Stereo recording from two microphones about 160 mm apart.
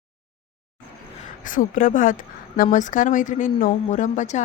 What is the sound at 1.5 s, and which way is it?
A woman's voice, 55° left (ahead or behind).